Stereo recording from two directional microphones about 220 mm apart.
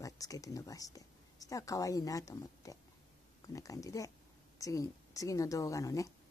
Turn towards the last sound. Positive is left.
turn(degrees=15)  # may be behind; listen again after turning